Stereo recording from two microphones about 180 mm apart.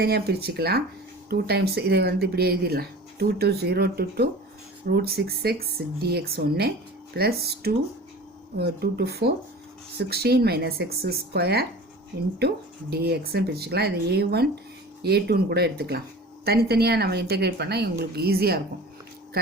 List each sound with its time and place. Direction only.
0.0 s speech: 60° right (ahead or behind)